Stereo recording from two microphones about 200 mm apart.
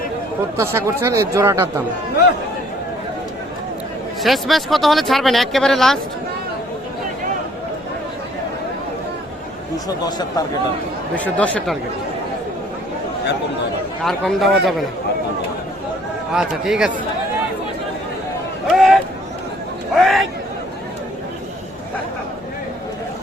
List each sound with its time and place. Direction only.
0.5 s speech: 15° right (ahead or behind)
4.2 s speech: centre (ahead or behind)
10.1 s speech: 20° left (ahead or behind)
11.1 s speech: 5° left (ahead or behind)
14.0 s speech: centre (ahead or behind)
16.3 s speech: 5° right (ahead or behind)
18.7 s a sound: centre (ahead or behind)
20.0 s a sound: centre (ahead or behind)